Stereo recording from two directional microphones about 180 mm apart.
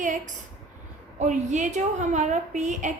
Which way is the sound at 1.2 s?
40° right (ahead or behind).